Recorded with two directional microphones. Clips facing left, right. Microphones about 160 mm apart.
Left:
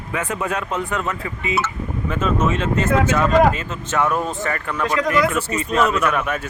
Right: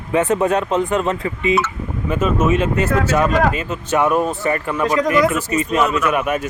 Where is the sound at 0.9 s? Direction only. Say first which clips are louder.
Right 6 dB; 20° right (ahead or behind).